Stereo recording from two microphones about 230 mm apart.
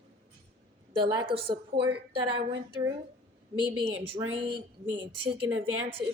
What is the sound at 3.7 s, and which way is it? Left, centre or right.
A woman's voice, right.